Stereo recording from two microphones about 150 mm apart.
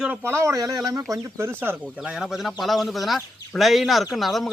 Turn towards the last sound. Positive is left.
turn(degrees=0)  # may be behind; listen again after turning